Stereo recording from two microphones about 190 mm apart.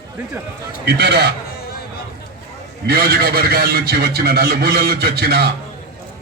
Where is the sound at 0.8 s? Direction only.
60° right (ahead or behind).